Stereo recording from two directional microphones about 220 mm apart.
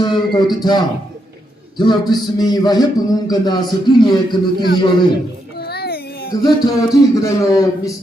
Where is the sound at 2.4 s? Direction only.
15° left (ahead or behind).